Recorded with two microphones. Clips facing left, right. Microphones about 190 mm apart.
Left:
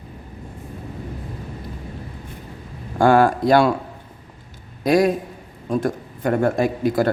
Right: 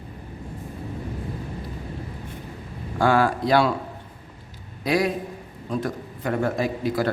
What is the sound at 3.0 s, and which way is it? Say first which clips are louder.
Speech: left 5 dB; 45° left (ahead or behind).